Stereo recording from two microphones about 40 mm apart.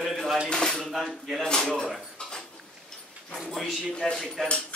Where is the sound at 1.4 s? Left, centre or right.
Centre.